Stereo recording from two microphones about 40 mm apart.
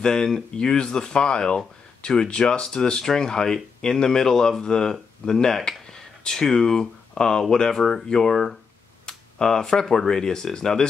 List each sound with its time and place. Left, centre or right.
0.0 s speech: centre